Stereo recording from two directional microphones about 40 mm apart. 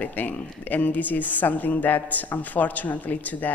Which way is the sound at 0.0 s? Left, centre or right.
Left.